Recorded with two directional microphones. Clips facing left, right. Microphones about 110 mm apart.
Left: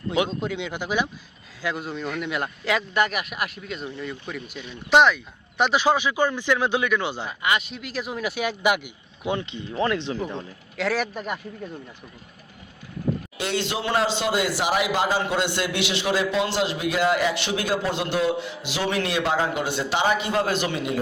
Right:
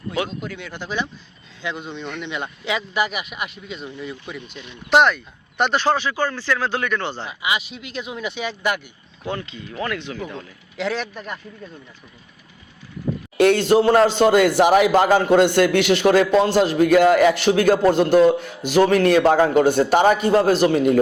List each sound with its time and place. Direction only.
0.1 s speech: 25° left (ahead or behind); by 7.3 s 10° left (ahead or behind)
7.3 s speech: 5° right (ahead or behind); by 10.4 s 25° left (ahead or behind)
10.8 s speech: 5° left (ahead or behind)
13.3 s a man's voice: 55° right (ahead or behind)